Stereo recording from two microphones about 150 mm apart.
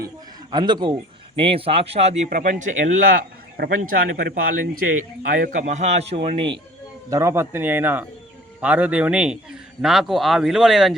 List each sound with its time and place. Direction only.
0.5 s a man's voice: 30° right (ahead or behind); by 3.2 s 65° right (ahead or behind)
3.6 s a man's voice: 90° right
5.3 s a man's voice: 60° right (ahead or behind); by 6.6 s 35° right (ahead or behind)
7.1 s a man's voice: 20° right (ahead or behind); by 10.9 s centre (ahead or behind)